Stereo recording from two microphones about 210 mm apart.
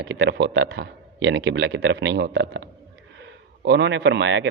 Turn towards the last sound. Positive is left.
turn(degrees=-60)  # may be behind; listen again after turning